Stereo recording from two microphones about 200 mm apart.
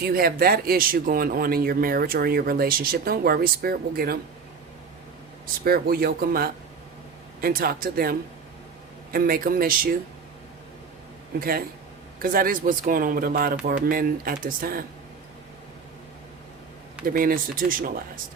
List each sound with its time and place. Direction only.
0.1 s speech: 45° right (ahead or behind)
5.6 s speech: 50° right (ahead or behind)
9.1 s speech: 45° right (ahead or behind)
11.3 s speech: 50° right (ahead or behind)
17.0 s speech: 45° right (ahead or behind)